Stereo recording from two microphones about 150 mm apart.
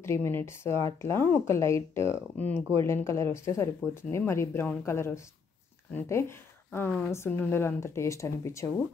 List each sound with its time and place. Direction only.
0.0 s speech: 15° left (ahead or behind)